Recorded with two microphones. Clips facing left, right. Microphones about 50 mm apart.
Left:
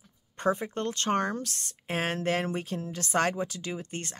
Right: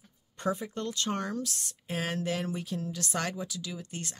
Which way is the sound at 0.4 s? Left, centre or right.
Left.